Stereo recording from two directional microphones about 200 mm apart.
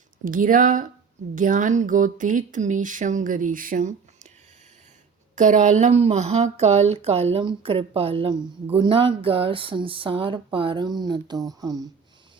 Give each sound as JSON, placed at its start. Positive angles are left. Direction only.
{"t": 0.3, "sound": "speech", "side_deg": -45}
{"t": 5.3, "sound": "speech", "side_deg": -40}